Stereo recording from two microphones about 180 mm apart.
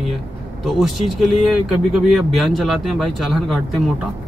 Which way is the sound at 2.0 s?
Centre (ahead or behind).